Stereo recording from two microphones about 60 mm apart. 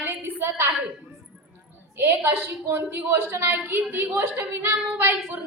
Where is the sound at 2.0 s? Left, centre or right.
Right.